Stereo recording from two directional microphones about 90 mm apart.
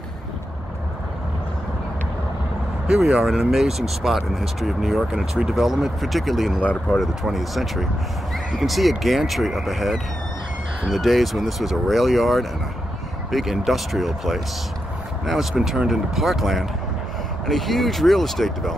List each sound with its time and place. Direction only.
2.9 s speech: 5° right (ahead or behind)
6.6 s speech: 15° left (ahead or behind)
7.0 s speech: centre (ahead or behind)